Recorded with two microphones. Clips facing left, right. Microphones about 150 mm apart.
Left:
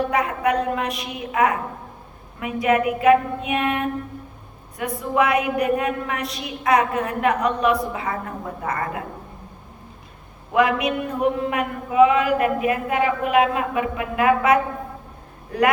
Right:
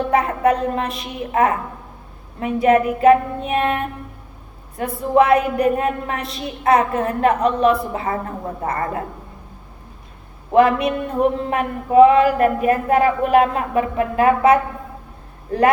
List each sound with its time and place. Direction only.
0.1 s a woman's voice: 30° right (ahead or behind)
10.5 s speech: 30° right (ahead or behind)